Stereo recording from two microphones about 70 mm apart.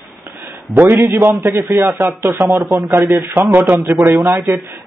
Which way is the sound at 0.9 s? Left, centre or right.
Right.